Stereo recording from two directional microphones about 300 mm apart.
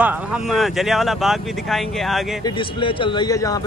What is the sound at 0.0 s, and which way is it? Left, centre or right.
Speech, centre.